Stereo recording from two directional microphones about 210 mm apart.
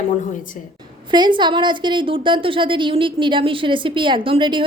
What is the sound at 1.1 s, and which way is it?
A woman's voice, 20° right (ahead or behind).